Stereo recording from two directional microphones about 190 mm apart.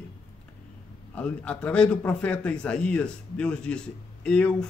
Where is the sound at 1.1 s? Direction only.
5° left (ahead or behind).